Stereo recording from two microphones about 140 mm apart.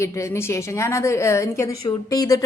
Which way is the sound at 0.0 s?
20° left (ahead or behind).